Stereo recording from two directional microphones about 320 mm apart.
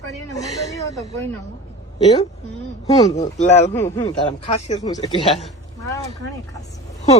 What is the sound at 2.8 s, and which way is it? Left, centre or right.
Speech, centre.